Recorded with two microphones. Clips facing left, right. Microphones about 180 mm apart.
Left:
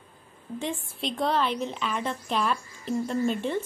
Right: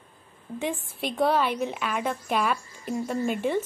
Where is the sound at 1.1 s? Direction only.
5° right (ahead or behind).